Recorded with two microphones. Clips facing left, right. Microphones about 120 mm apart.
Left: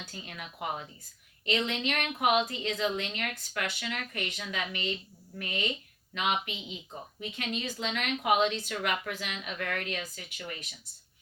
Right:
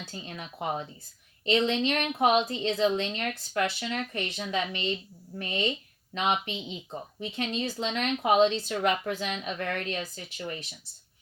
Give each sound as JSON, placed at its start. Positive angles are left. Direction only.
{"t": 0.1, "sound": "a woman's voice", "side_deg": -30}